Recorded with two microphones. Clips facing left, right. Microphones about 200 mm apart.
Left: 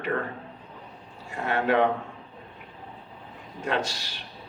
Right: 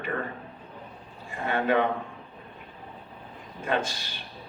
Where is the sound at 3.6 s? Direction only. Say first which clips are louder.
Even; 75° left (ahead or behind).